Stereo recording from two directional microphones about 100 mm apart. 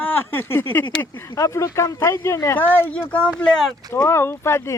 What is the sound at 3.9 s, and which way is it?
Speech, 25° left (ahead or behind).